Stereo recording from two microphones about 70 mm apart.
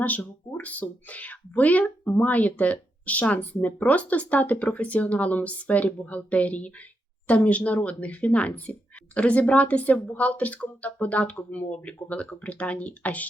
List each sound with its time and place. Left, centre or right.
0.0 s speech: left